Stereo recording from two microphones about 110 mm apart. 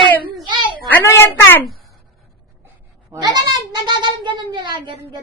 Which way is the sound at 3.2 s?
40° right (ahead or behind).